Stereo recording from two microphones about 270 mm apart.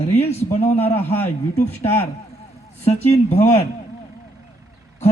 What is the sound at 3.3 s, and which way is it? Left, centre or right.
Speech, left.